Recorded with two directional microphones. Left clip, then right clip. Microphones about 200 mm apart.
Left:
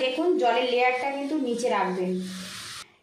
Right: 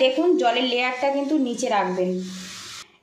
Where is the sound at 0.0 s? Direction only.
40° right (ahead or behind).